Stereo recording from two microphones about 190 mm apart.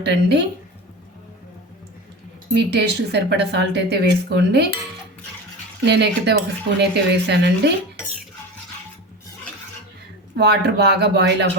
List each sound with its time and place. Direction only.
0.0 s speech: 60° right (ahead or behind)
2.6 s speech: 60° right (ahead or behind)
5.8 s speech: 60° right (ahead or behind)
10.3 s speech: 60° right (ahead or behind)